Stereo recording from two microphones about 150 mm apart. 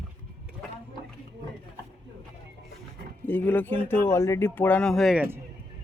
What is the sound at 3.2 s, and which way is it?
Speech, 10° left (ahead or behind).